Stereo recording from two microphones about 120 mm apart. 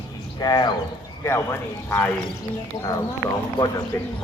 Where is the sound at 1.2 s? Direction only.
20° left (ahead or behind).